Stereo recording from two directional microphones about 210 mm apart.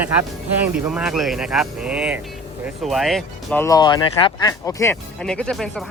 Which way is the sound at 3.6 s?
20° left (ahead or behind).